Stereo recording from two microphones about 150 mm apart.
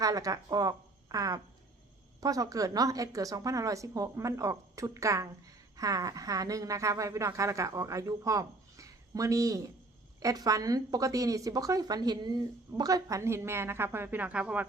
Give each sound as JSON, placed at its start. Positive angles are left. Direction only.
{"t": 0.0, "sound": "a woman's voice", "side_deg": -25}